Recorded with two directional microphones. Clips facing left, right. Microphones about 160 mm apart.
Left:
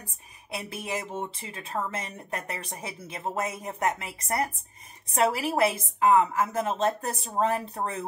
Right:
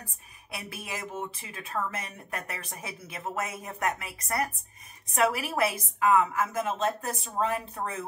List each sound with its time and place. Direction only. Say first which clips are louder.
0.5 s a woman's voice: left 5 dB; 25° left (ahead or behind)